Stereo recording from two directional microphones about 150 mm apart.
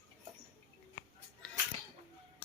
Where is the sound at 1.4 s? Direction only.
5° left (ahead or behind).